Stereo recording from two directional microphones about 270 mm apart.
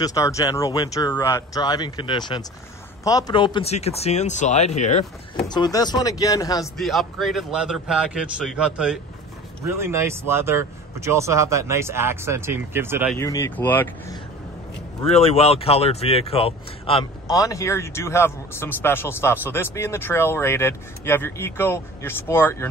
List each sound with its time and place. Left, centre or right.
0.0 s speech: centre
6.6 s a man's voice: centre
13.1 s speech: centre
15.0 s speech: left